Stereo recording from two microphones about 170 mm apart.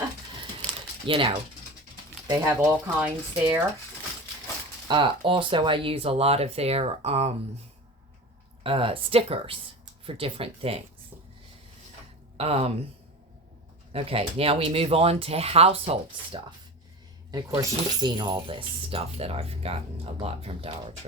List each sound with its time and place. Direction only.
1.0 s pulleys: 30° right (ahead or behind)
2.3 s speech: 15° right (ahead or behind)
4.9 s speech: 30° right (ahead or behind)
8.6 s speech: 30° right (ahead or behind)
12.4 s speech: 35° right (ahead or behind)
13.9 s speech: 35° right (ahead or behind)
17.3 s speech: 25° right (ahead or behind)